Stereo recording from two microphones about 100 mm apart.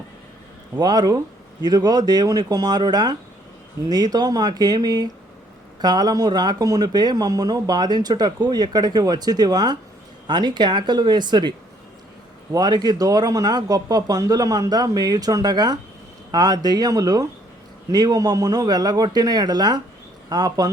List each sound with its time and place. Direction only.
0.8 s speech: 40° right (ahead or behind)